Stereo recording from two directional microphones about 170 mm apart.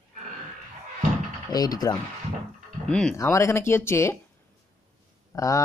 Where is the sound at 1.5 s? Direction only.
20° left (ahead or behind).